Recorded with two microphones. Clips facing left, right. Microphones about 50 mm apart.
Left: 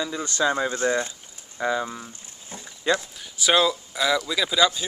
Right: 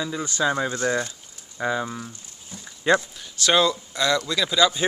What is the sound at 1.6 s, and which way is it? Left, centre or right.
Speech, centre.